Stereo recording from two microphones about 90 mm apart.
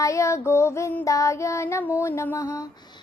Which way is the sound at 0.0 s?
35° left (ahead or behind).